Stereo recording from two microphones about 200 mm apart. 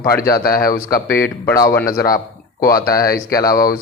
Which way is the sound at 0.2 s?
45° left (ahead or behind).